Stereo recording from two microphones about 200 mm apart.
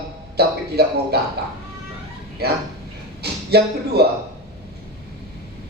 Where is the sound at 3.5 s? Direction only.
55° right (ahead or behind).